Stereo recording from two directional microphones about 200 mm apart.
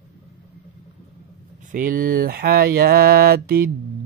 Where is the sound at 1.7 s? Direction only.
45° right (ahead or behind).